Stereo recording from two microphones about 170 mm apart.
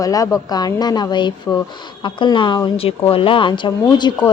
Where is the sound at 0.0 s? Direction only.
20° left (ahead or behind).